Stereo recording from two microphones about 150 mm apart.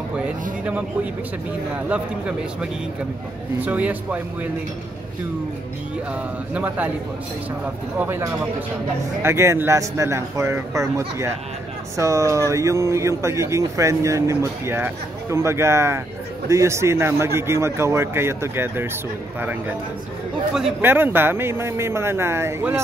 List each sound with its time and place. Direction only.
1.9 s a man's voice: 5° right (ahead or behind)
6.5 s a man's voice: 10° right (ahead or behind)
20.8 s a man's voice: 15° right (ahead or behind)